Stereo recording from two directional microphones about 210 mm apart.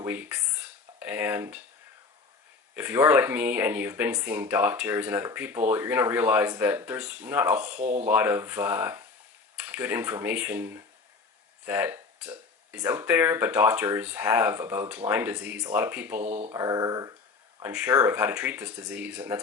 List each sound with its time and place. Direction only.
0.0 s speech: 10° right (ahead or behind)
2.7 s speech: 10° right (ahead or behind)
7.8 s speech: 35° right (ahead or behind)
8.0 s speech: 10° right (ahead or behind)
16.2 s speech: 35° right (ahead or behind)
16.5 s speech: 15° right (ahead or behind)